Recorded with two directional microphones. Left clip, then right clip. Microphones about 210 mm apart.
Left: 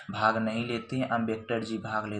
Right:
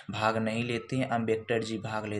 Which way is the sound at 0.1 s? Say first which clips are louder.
Left 2 dB; 20° right (ahead or behind).